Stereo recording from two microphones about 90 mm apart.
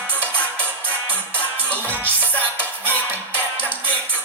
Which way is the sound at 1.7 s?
15° left (ahead or behind).